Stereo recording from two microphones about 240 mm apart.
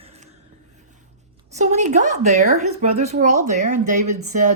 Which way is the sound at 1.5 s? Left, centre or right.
Right.